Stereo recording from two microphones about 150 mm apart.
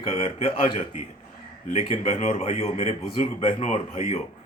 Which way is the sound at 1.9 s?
50° left (ahead or behind).